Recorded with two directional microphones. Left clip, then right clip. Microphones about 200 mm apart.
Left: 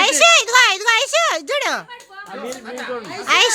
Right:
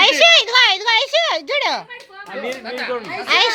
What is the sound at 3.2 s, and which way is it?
Speech, 25° left (ahead or behind).